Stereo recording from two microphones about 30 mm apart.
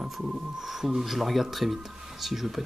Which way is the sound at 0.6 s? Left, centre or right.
Centre.